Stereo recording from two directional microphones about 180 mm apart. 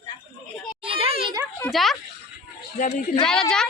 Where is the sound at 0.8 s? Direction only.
30° right (ahead or behind).